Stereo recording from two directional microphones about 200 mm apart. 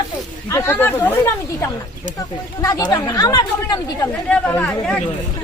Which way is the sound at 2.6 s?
20° left (ahead or behind).